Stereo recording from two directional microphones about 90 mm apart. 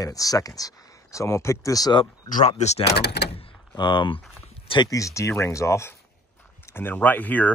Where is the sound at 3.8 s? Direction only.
60° left (ahead or behind).